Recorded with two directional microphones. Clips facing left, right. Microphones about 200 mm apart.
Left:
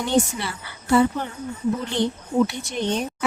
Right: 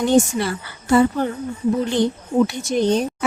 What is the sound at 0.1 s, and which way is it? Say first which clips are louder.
Speech: right 3 dB; 45° right (ahead or behind).